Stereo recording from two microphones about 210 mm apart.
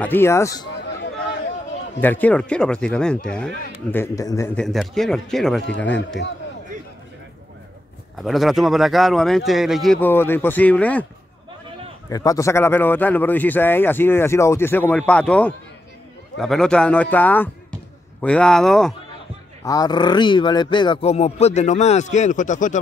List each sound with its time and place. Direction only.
0.0 s a man's voice: 10° left (ahead or behind)
2.0 s speech: 10° left (ahead or behind)
4.6 s speech: centre (ahead or behind)
5.9 s a man's voice: 55° left (ahead or behind)
8.2 s speech: centre (ahead or behind)
12.1 s a man's voice: 15° left (ahead or behind)
19.6 s speech: 15° left (ahead or behind); by 22.8 s 35° left (ahead or behind)